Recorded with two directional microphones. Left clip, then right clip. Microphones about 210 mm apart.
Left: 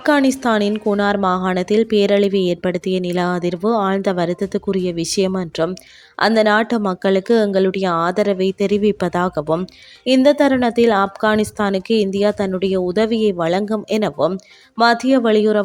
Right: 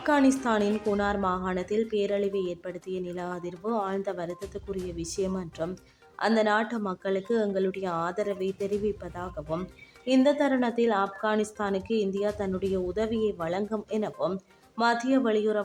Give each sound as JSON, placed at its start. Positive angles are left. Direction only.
{"t": 0.0, "sound": "a woman's voice", "side_deg": 35}